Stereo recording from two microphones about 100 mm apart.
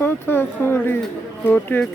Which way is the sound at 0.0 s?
25° left (ahead or behind).